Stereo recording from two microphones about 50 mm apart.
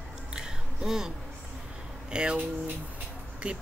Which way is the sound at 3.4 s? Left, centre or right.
Right.